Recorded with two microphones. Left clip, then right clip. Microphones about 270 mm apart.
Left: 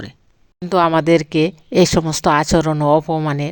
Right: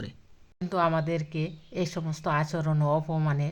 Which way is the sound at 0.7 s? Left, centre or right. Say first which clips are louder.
Left 13 dB; left.